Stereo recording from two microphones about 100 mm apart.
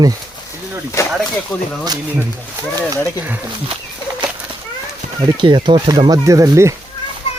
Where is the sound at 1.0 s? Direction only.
30° left (ahead or behind).